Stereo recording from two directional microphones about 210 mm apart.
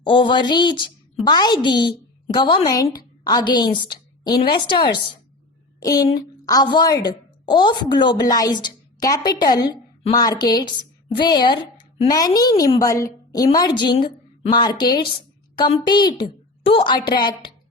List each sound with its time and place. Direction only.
0.0 s a woman's voice: 25° left (ahead or behind)